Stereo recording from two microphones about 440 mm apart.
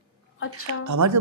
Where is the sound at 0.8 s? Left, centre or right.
Right.